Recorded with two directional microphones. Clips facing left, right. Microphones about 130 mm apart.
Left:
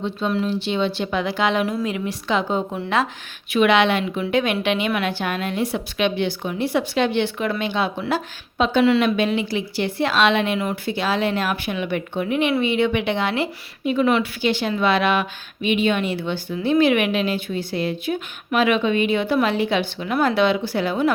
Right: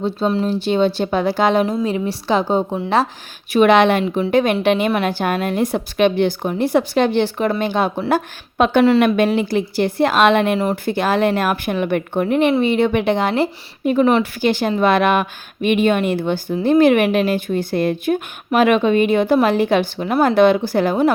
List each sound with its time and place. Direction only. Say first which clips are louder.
0.0 s a woman's voice: right 4 dB; 35° right (ahead or behind)
8.5 s a woman's voice: right 4 dB; 55° right (ahead or behind)